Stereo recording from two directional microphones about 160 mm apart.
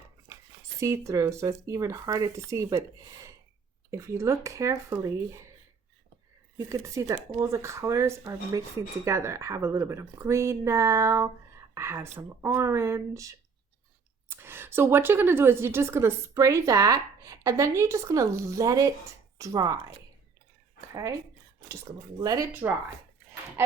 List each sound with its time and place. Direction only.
0.8 s speech: 20° right (ahead or behind)
3.9 s speech: 20° right (ahead or behind)
6.6 s a woman's voice: 20° right (ahead or behind)
20.9 s speech: 20° right (ahead or behind)
22.2 s speech: 25° right (ahead or behind)
23.6 s speech: 15° right (ahead or behind)